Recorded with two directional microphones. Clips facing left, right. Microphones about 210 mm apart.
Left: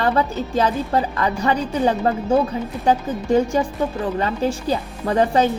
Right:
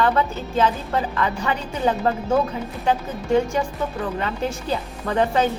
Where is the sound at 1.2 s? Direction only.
40° left (ahead or behind).